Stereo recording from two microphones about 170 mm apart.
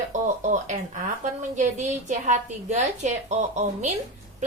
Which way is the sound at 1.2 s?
45° right (ahead or behind).